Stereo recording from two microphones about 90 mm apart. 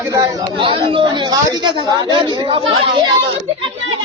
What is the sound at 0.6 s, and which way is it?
A woman's voice, 70° right (ahead or behind).